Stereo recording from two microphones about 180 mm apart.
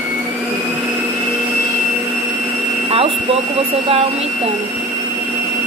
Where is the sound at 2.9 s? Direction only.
30° right (ahead or behind).